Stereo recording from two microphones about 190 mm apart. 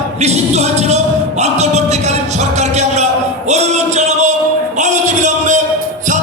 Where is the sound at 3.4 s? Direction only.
35° right (ahead or behind).